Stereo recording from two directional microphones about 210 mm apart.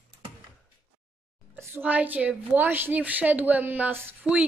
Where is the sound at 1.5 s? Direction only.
10° right (ahead or behind).